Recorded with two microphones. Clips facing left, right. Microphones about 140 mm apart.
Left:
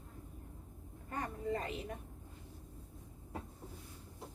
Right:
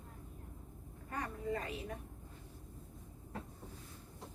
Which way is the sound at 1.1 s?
25° left (ahead or behind).